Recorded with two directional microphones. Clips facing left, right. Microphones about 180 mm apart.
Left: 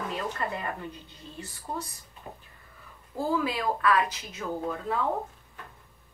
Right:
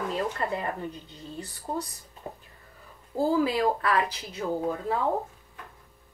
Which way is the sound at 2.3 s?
35° right (ahead or behind).